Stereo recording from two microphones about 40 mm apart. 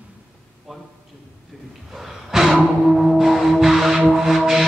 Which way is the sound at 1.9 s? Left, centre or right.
Centre.